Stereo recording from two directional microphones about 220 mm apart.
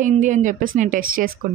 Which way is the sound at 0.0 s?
35° right (ahead or behind).